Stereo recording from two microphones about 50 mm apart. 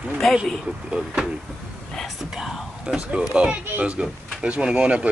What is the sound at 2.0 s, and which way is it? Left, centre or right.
Whispering, centre.